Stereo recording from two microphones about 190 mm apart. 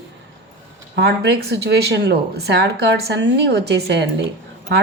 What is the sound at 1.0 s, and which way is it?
A woman's voice, 60° right (ahead or behind).